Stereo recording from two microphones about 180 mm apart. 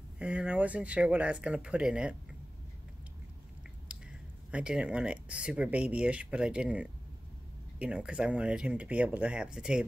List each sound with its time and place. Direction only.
0.2 s speech: 5° right (ahead or behind)
3.9 s a sound: 5° right (ahead or behind)
4.5 s speech: 5° right (ahead or behind)